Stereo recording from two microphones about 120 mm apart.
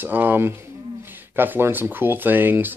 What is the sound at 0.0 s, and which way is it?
Speech, 15° right (ahead or behind).